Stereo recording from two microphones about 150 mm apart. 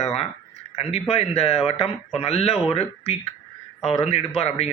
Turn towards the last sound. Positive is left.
turn(degrees=45)  # may be behind; listen again after turning